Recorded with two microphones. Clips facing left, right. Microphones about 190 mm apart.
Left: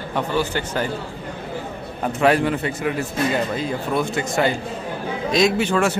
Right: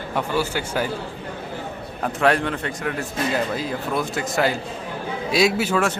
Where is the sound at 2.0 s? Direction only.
Centre (ahead or behind).